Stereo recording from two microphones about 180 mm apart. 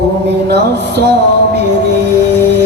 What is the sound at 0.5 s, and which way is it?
Music, 65° right (ahead or behind).